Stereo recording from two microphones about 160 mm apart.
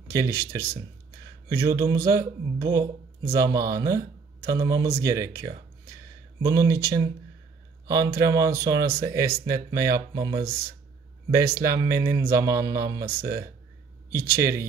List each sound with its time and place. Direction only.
0.1 s speech: 15° right (ahead or behind)
6.4 s speech: 20° right (ahead or behind)
11.6 s speech: 20° right (ahead or behind)